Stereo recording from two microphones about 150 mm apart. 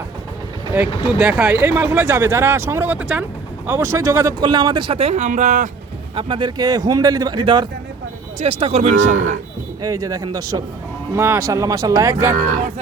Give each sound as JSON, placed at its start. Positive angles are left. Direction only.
{"t": 0.7, "sound": "speech", "side_deg": -10}
{"t": 6.1, "sound": "speech", "side_deg": -30}
{"t": 9.8, "sound": "speech", "side_deg": -20}